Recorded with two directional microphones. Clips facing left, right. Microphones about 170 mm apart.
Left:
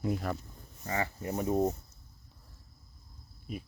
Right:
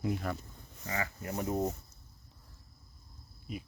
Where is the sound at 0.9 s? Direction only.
25° left (ahead or behind).